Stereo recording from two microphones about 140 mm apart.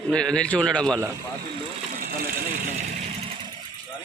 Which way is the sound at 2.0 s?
85° right.